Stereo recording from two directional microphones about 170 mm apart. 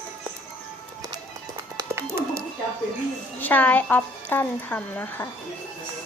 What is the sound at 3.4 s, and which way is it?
Speech, 10° left (ahead or behind).